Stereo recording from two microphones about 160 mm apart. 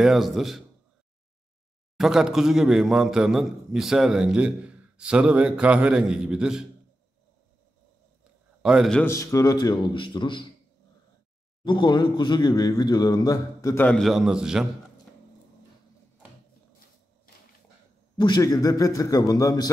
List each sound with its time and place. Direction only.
0.0 s a man's voice: centre (ahead or behind)
2.0 s a man's voice: 5° right (ahead or behind)
8.6 s a man's voice: 5° right (ahead or behind)
8.9 s a man's voice: 15° left (ahead or behind)
11.6 s a man's voice: 30° left (ahead or behind)
13.8 s a man's voice: centre (ahead or behind)
18.1 s a man's voice: 25° left (ahead or behind)